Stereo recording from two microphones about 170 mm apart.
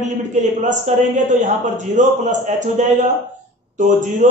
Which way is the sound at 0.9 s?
45° right (ahead or behind).